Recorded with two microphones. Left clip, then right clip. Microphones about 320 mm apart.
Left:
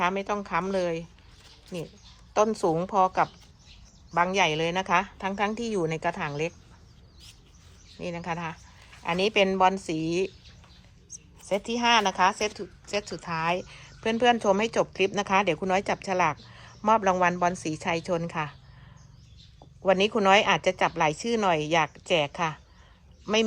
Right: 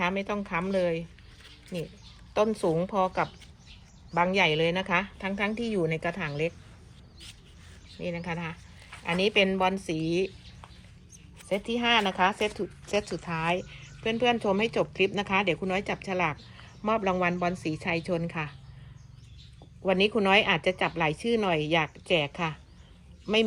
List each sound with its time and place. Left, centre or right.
0.0 s a woman's voice: centre
2.3 s a woman's voice: centre
7.9 s speech: left
8.3 s a woman's voice: centre
11.3 s a woman's voice: centre
13.7 s a sound: left
14.2 s a woman's voice: centre
19.8 s speech: centre